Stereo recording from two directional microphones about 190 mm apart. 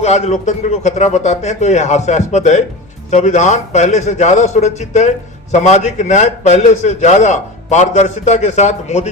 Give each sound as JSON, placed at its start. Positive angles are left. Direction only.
{"t": 0.0, "sound": "a man's voice", "side_deg": 35}